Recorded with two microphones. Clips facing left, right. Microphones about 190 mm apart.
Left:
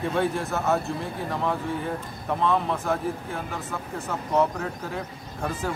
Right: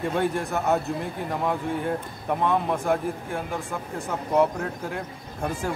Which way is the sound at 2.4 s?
15° right (ahead or behind).